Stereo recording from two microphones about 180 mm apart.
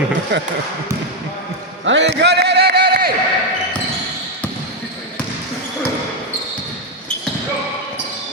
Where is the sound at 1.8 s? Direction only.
85° right; by 3.1 s 60° right (ahead or behind).